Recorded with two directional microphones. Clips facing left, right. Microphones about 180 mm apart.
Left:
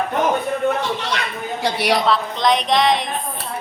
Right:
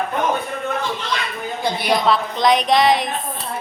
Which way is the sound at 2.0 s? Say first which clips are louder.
Right 1 dB; centre (ahead or behind).